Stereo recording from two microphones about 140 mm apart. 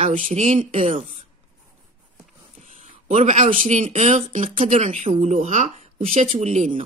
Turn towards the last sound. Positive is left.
turn(degrees=-55)  # may be behind; listen again after turning